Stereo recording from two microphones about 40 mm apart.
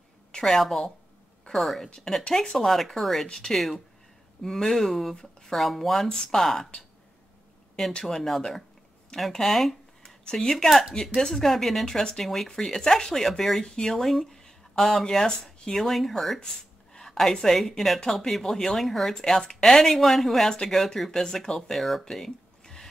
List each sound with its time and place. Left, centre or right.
0.3 s a sound: centre
0.6 s speech: centre
8.0 s speech: centre
11.4 s speech: centre
11.8 s speech: centre
22.1 s a sound: centre